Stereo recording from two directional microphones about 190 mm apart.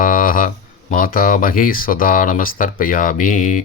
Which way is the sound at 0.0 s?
45° left (ahead or behind).